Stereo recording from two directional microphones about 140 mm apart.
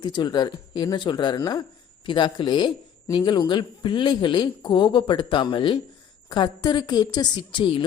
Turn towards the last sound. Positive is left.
turn(degrees=35)  # may be behind; listen again after turning